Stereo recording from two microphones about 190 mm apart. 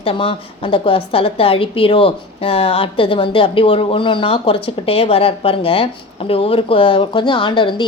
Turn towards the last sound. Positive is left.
turn(degrees=25)  # may be behind; listen again after turning